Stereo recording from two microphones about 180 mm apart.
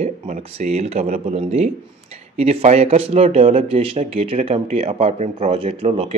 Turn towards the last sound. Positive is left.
turn(degrees=-30)  # may be behind; listen again after turning